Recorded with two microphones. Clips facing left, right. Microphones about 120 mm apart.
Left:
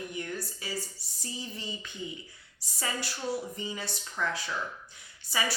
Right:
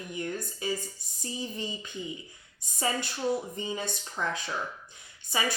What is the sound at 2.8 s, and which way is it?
Speech, 25° right (ahead or behind).